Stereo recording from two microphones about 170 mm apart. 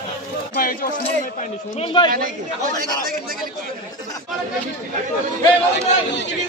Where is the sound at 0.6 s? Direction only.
55° left (ahead or behind).